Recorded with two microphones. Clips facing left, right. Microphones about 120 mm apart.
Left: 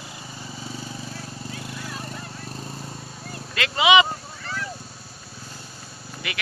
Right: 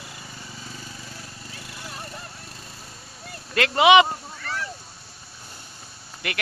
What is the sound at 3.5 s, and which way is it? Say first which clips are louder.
Speech: right 3 dB; 55° right (ahead or behind).